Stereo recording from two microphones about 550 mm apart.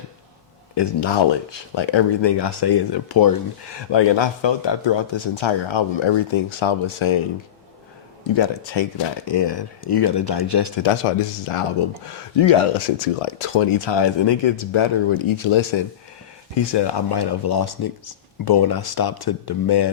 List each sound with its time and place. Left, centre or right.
0.8 s speech: left
8.4 s speech: left
11.0 s speech: left
16.6 s speech: left